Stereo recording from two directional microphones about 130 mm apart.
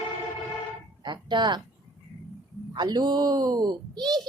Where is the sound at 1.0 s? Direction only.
35° right (ahead or behind).